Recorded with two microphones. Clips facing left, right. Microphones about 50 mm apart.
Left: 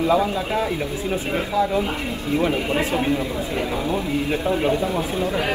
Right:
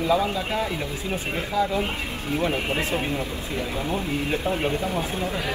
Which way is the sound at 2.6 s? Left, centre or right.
Left.